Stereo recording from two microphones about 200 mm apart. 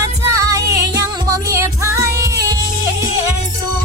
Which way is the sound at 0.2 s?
15° right (ahead or behind).